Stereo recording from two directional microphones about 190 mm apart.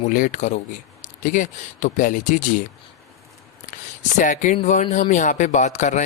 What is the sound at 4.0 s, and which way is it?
Speech, 40° left (ahead or behind).